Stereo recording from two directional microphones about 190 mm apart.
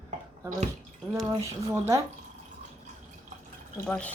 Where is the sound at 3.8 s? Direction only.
5° left (ahead or behind).